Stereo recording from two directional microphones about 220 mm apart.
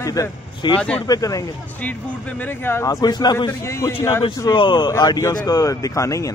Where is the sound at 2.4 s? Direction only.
10° left (ahead or behind).